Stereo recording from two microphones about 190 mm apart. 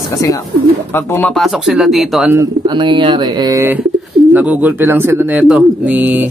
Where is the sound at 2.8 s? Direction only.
25° right (ahead or behind).